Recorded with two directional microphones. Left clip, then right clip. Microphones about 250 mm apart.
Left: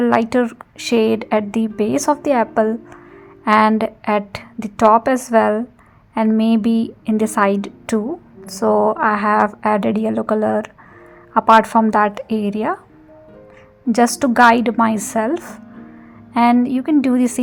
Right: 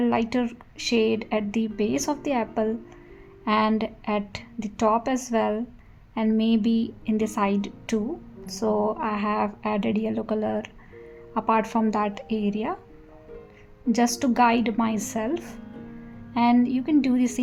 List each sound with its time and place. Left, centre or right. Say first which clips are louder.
0.0 s a woman's voice: left 9 dB; centre
13.9 s a woman's voice: left 9 dB; left